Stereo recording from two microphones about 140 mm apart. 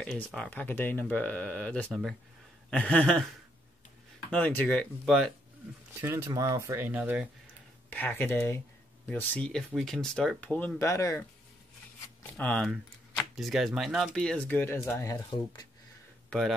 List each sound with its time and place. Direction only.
0.0 s speech: 5° left (ahead or behind)
4.3 s speech: 10° left (ahead or behind)
5.9 s speech: 15° right (ahead or behind)
7.9 s speech: 15° left (ahead or behind)
10.9 s speech: 25° left (ahead or behind)
12.4 s speech: 10° left (ahead or behind); by 15.6 s 25° left (ahead or behind)
16.3 s speech: 5° left (ahead or behind)